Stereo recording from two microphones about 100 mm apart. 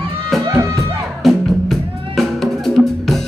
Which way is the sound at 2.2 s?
5° left (ahead or behind).